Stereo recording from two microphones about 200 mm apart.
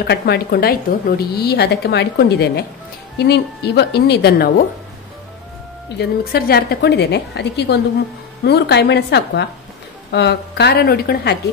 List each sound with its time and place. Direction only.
0.0 s a woman's voice: 55° left (ahead or behind)
5.9 s a woman's voice: 50° left (ahead or behind)